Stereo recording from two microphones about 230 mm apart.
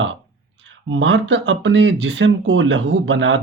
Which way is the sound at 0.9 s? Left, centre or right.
Right.